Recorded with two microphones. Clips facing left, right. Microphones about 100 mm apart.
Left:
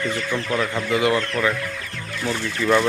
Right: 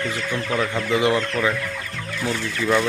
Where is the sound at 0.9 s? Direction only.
25° right (ahead or behind).